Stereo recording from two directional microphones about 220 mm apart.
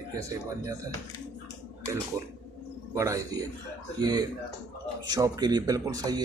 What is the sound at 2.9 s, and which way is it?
Speech, 15° right (ahead or behind).